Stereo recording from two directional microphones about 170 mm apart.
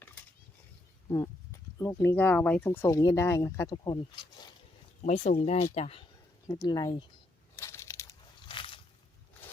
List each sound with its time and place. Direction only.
1.8 s speech: 15° left (ahead or behind)
5.0 s speech: 40° left (ahead or behind)
6.7 s speech: 25° left (ahead or behind)
7.5 s crunch: 15° left (ahead or behind)
8.4 s a sound: 30° left (ahead or behind)